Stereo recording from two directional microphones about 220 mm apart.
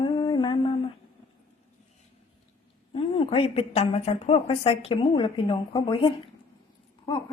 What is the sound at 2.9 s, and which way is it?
A woman's voice, 25° left (ahead or behind).